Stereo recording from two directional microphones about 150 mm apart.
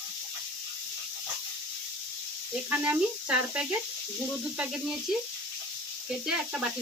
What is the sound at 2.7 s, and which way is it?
Speech, 10° right (ahead or behind).